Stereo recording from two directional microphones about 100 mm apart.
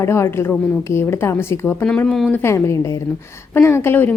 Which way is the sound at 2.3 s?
25° left (ahead or behind).